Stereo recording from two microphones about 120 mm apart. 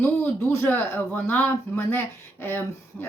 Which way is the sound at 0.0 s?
20° left (ahead or behind).